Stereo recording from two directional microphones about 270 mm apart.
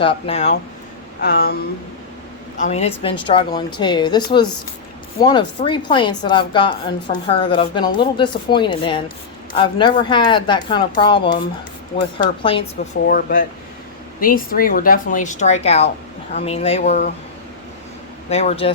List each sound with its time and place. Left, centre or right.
0.0 s speech: left
1.2 s speech: left
2.6 s a woman's voice: left
13.1 s speech: left
18.3 s speech: left